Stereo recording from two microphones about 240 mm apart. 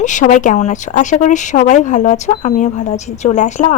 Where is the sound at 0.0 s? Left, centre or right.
Left.